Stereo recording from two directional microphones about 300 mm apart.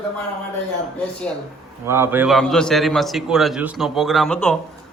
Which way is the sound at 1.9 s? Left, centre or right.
Centre.